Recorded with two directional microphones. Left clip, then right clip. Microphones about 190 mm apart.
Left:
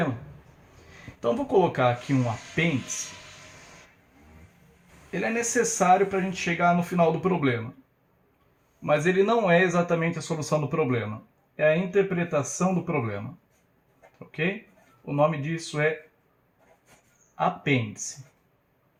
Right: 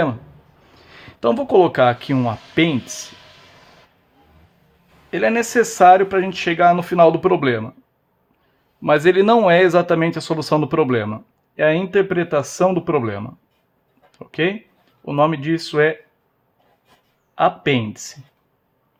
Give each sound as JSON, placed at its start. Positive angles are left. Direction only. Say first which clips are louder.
{"t": 0.9, "sound": "speech", "louder": "right 8 dB", "side_deg": -50}
{"t": 5.1, "sound": "speech", "louder": "right 9 dB", "side_deg": -55}
{"t": 8.8, "sound": "speech", "louder": "right 9 dB", "side_deg": -50}
{"t": 14.3, "sound": "speech", "louder": "right 9 dB", "side_deg": -50}
{"t": 17.3, "sound": "speech", "louder": "right 8 dB", "side_deg": -50}